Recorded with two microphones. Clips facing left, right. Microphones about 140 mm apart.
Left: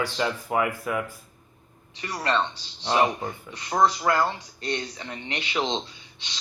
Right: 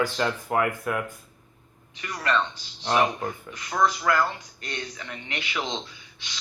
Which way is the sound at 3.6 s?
30° left (ahead or behind).